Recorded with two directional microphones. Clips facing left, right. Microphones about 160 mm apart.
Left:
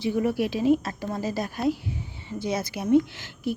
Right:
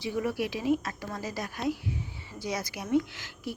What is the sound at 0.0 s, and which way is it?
A woman's voice, 25° left (ahead or behind).